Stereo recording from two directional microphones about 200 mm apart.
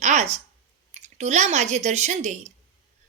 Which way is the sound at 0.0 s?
35° right (ahead or behind).